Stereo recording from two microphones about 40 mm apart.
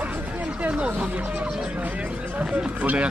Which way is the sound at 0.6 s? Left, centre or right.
Right.